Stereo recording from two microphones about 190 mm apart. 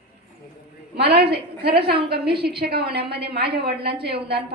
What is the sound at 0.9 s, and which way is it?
A woman's voice, 60° right (ahead or behind).